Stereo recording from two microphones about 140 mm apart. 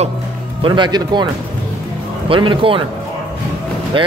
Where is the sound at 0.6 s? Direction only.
35° right (ahead or behind).